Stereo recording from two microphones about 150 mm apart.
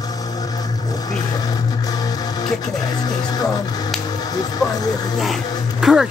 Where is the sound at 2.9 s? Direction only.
25° left (ahead or behind).